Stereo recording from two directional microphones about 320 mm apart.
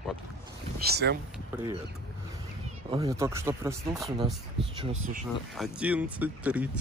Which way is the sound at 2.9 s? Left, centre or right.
Centre.